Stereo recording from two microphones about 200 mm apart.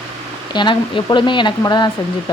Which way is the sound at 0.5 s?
25° left (ahead or behind).